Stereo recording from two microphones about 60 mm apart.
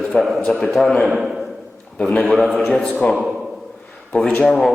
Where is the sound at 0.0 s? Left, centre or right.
Centre.